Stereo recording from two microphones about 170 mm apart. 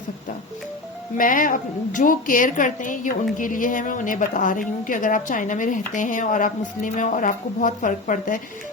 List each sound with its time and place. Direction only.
1.1 s speech: 55° left (ahead or behind)